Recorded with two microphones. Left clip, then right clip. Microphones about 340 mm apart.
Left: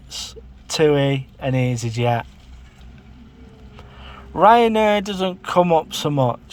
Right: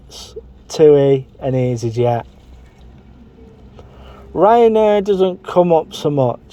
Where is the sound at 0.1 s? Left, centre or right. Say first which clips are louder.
Left 1 dB; left.